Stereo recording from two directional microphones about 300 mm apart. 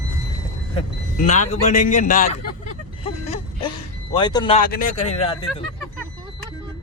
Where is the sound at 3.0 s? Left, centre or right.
Centre.